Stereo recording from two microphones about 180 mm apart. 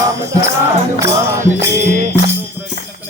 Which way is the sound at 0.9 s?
15° right (ahead or behind).